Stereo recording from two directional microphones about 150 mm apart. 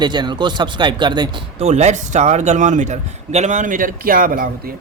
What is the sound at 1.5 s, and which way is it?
A man's voice, 50° right (ahead or behind).